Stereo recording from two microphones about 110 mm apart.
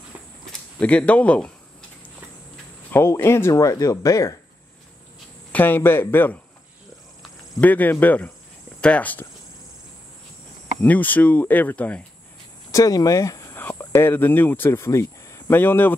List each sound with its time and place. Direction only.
0.5 s speech: 10° left (ahead or behind)
2.9 s speech: 20° left (ahead or behind)
5.5 s speech: 15° left (ahead or behind)
7.6 s speech: 15° left (ahead or behind)
10.8 s speech: 15° left (ahead or behind)
12.7 s speech: 35° left (ahead or behind)
13.6 s speech: 20° left (ahead or behind)